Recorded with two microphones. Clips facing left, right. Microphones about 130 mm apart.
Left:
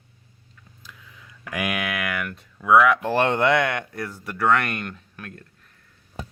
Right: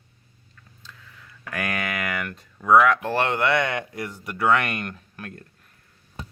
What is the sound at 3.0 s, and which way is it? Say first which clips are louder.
Speech: left 3 dB; 20° left (ahead or behind).